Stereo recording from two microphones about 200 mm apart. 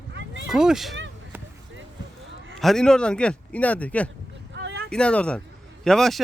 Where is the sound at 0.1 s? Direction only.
65° right (ahead or behind).